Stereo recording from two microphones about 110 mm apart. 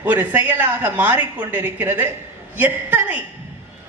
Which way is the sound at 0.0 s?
15° right (ahead or behind).